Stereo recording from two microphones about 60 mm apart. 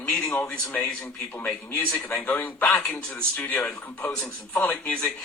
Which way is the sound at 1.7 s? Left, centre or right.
Left.